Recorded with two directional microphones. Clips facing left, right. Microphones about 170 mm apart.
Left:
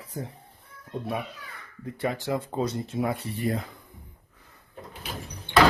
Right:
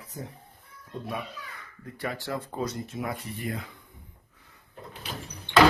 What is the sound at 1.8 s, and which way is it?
Speech, 20° left (ahead or behind).